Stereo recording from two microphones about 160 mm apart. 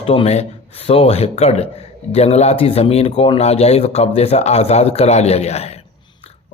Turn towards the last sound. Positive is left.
turn(degrees=40)  # may be behind; listen again after turning